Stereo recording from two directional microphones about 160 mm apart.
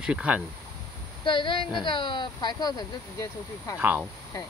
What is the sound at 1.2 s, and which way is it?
A woman's voice, 30° left (ahead or behind).